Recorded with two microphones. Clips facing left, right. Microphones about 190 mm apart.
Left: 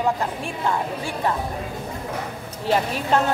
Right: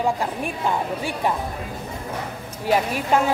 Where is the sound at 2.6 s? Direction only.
10° right (ahead or behind).